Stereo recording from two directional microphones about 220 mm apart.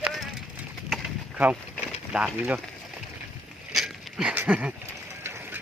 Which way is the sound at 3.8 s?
Centre (ahead or behind).